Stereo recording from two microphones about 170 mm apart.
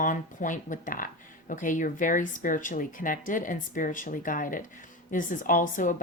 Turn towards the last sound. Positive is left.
turn(degrees=50)  # may be behind; listen again after turning